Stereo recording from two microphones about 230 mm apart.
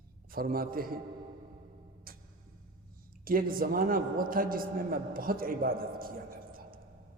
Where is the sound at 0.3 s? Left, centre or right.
Right.